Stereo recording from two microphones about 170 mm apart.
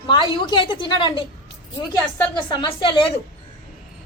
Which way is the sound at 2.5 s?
25° left (ahead or behind).